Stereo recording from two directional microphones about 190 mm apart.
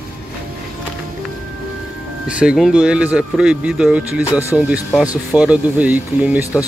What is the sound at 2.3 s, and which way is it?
Speech, 5° right (ahead or behind).